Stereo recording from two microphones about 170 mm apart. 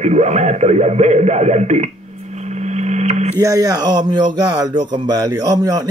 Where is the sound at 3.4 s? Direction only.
20° right (ahead or behind).